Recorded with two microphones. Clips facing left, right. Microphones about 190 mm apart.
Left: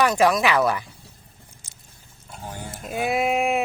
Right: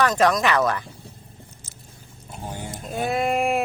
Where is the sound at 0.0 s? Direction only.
10° left (ahead or behind).